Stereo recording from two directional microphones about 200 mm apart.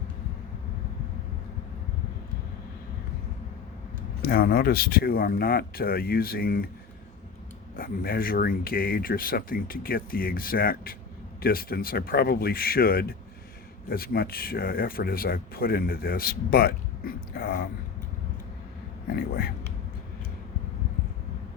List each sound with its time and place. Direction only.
4.2 s speech: 50° left (ahead or behind)
7.8 s speech: 45° left (ahead or behind)
19.1 s speech: 45° left (ahead or behind)